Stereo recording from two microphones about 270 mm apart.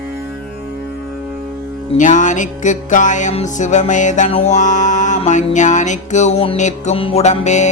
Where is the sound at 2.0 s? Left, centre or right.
Left.